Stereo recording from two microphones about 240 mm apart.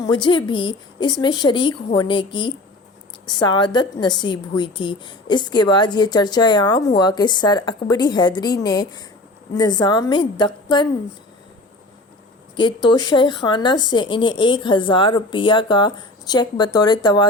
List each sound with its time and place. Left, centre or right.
0.0 s a woman's voice: centre
12.5 s speech: centre